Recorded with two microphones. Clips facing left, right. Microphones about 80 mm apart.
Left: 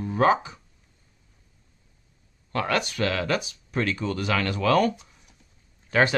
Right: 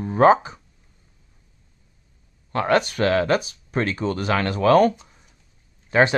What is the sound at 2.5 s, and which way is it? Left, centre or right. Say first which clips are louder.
Speech: right 6 dB; right.